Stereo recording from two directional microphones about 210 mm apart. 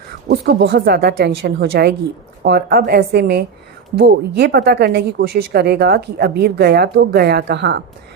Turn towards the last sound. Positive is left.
turn(degrees=-55)  # may be behind; listen again after turning